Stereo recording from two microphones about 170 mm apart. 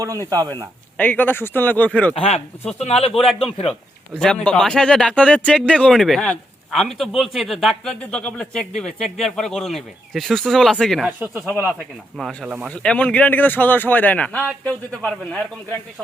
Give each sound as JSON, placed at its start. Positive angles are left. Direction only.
{"t": 0.0, "sound": "speech", "side_deg": -20}
{"t": 0.9, "sound": "speech", "side_deg": 10}
{"t": 2.1, "sound": "speech", "side_deg": 35}
{"t": 4.2, "sound": "speech", "side_deg": 5}
{"t": 11.2, "sound": "speech", "side_deg": -10}
{"t": 12.1, "sound": "speech", "side_deg": 0}
{"t": 12.8, "sound": "speech", "side_deg": 5}